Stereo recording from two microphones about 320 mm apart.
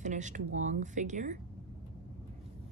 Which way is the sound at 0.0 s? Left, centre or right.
Right.